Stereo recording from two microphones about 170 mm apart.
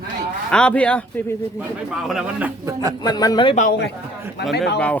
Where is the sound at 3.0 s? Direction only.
25° left (ahead or behind).